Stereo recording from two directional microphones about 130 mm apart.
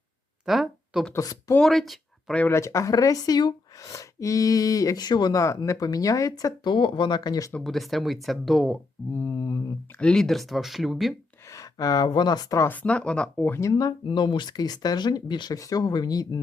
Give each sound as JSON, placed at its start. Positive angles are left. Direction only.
{"t": 0.4, "sound": "a sound", "side_deg": 0}
{"t": 1.1, "sound": "speech", "side_deg": 25}
{"t": 1.5, "sound": "speech", "side_deg": 0}
{"t": 2.4, "sound": "speech", "side_deg": 20}
{"t": 7.5, "sound": "speech", "side_deg": 0}
{"t": 9.1, "sound": "mantra", "side_deg": 20}
{"t": 10.0, "sound": "speech", "side_deg": 5}
{"t": 11.4, "sound": "speech", "side_deg": 25}